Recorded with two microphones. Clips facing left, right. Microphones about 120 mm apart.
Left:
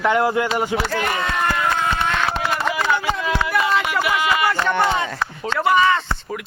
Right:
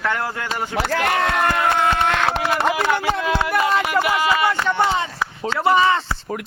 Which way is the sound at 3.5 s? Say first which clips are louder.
Right 1 dB; 40° right (ahead or behind).